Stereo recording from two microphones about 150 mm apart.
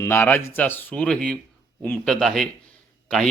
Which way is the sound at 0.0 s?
15° left (ahead or behind).